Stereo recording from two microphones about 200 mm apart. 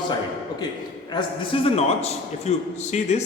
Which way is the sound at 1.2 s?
25° left (ahead or behind).